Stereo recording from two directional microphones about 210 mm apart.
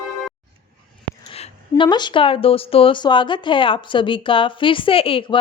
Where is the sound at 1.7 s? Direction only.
20° left (ahead or behind).